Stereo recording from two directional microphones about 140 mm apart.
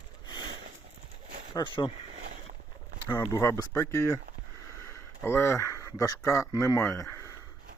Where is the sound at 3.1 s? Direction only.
20° left (ahead or behind).